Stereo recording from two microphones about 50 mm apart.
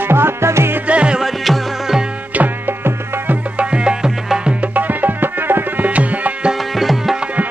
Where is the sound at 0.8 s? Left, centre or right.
Right.